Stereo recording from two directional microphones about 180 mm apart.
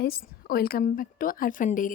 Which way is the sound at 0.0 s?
55° left (ahead or behind).